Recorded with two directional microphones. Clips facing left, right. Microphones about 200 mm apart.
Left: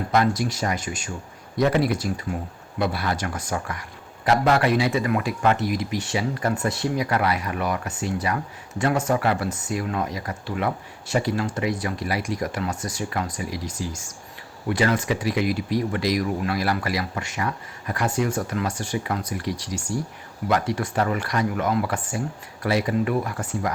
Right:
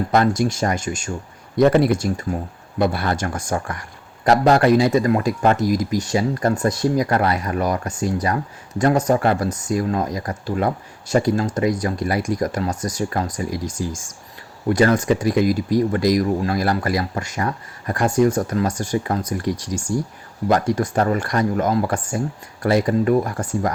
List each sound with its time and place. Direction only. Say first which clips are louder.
0.1 s speech: right 3 dB; 45° right (ahead or behind)